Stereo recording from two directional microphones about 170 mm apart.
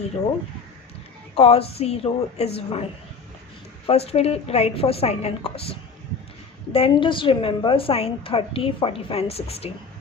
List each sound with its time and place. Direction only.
1.4 s a woman's voice: 35° left (ahead or behind)
3.8 s a woman's voice: 35° left (ahead or behind)